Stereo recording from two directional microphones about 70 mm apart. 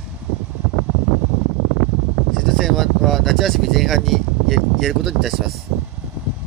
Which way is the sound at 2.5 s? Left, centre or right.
Centre.